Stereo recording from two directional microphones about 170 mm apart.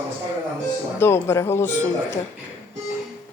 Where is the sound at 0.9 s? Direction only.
15° left (ahead or behind).